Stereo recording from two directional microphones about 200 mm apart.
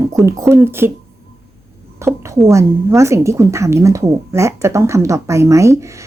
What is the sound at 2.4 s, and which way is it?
Speech, 15° right (ahead or behind).